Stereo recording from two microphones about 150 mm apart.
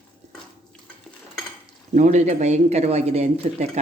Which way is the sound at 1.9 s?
55° right (ahead or behind).